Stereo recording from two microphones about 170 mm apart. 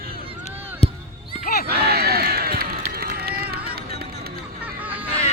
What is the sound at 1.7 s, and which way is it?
Crowd, 70° right (ahead or behind).